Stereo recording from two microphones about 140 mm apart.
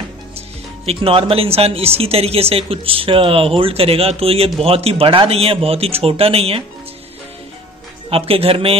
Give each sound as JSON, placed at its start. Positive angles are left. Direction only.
{"t": 0.8, "sound": "speech", "side_deg": -40}
{"t": 8.1, "sound": "speech", "side_deg": -45}